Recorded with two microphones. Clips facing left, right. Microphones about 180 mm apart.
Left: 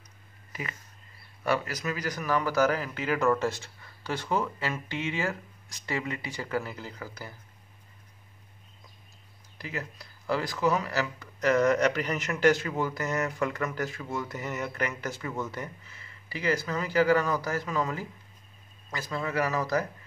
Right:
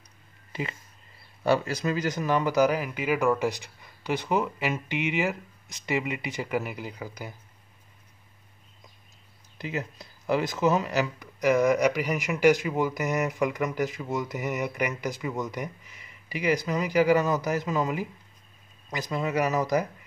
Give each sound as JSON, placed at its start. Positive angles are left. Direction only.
{"t": 0.5, "sound": "a sound", "side_deg": -25}
{"t": 1.4, "sound": "speech", "side_deg": -25}
{"t": 9.6, "sound": "speech", "side_deg": -20}